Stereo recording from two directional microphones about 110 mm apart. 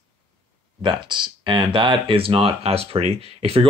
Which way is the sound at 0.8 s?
45° right (ahead or behind).